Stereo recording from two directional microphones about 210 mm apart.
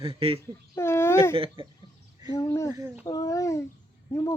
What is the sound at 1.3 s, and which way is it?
Speech, 25° right (ahead or behind).